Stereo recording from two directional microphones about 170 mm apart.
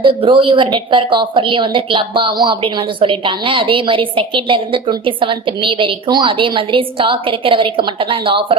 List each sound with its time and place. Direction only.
0.0 s a woman's voice: 30° right (ahead or behind)